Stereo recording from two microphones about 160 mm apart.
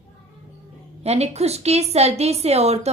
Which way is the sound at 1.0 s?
40° right (ahead or behind).